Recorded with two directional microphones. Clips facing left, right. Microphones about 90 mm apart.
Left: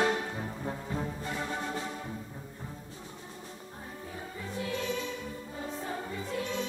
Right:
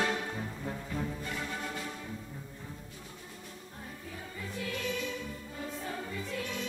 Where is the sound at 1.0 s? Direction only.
30° left (ahead or behind).